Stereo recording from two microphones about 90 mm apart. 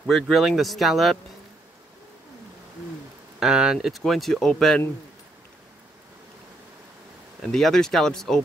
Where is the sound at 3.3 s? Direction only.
5° right (ahead or behind).